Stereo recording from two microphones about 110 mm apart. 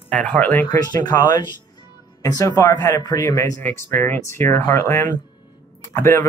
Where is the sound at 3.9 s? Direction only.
20° left (ahead or behind).